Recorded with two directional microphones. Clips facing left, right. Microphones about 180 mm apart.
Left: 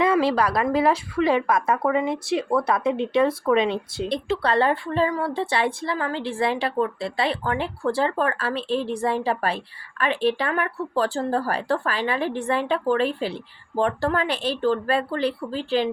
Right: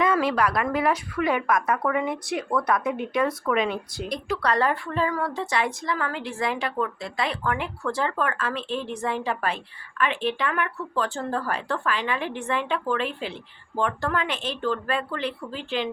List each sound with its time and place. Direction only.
0.0 s speech: 30° left (ahead or behind)